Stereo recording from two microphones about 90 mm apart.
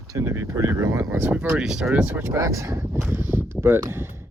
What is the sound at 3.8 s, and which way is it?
Speech, 30° right (ahead or behind).